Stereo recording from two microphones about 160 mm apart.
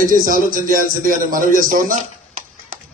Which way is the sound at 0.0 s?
60° right (ahead or behind).